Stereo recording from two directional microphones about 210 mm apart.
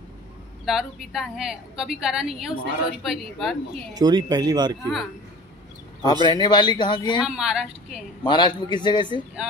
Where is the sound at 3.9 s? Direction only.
20° right (ahead or behind).